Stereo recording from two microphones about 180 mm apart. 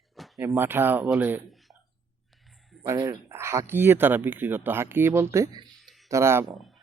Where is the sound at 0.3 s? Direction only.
15° right (ahead or behind).